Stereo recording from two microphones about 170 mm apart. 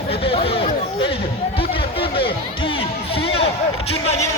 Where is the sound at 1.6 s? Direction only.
30° left (ahead or behind).